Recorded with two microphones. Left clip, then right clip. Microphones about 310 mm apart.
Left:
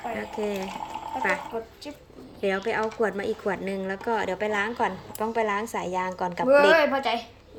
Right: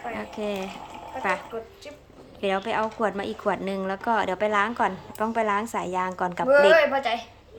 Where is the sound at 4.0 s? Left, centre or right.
Right.